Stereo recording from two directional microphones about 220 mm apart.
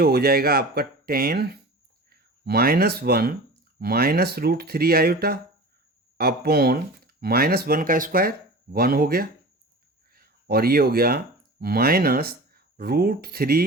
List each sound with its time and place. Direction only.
0.0 s speech: 45° right (ahead or behind)